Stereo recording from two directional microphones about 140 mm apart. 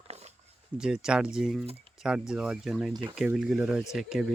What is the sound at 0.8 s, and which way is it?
Speech, 5° right (ahead or behind).